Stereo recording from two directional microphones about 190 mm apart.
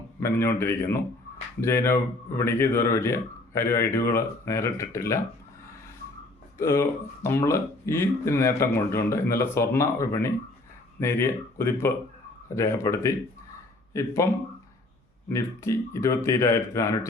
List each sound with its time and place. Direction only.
0.2 s speech: 15° left (ahead or behind)
6.6 s speech: 15° left (ahead or behind)
15.3 s speech: 15° left (ahead or behind)